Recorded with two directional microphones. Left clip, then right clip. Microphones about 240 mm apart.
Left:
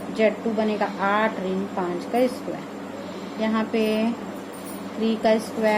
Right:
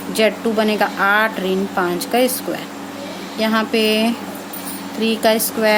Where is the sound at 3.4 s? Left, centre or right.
Right.